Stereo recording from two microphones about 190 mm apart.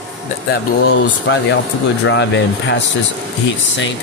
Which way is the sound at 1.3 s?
75° left (ahead or behind).